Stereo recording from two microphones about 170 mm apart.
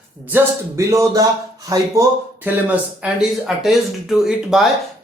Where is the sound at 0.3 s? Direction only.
15° right (ahead or behind).